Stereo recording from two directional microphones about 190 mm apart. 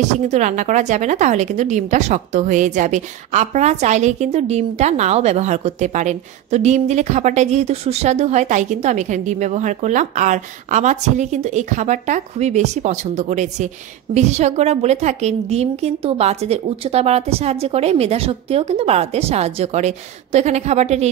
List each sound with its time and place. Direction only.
0.3 s a woman's voice: 40° right (ahead or behind)